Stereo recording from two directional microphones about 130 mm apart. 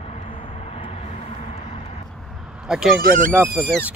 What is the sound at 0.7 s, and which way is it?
Vehicle, 50° left (ahead or behind).